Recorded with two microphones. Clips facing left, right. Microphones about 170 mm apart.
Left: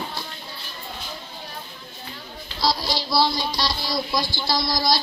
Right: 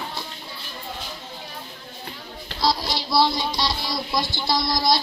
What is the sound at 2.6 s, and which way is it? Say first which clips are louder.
A child's voice: even; 20° right (ahead or behind).